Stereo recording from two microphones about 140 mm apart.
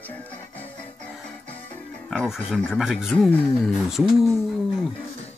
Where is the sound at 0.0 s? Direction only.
10° left (ahead or behind).